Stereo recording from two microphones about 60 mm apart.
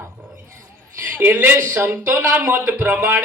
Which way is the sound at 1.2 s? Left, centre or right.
Right.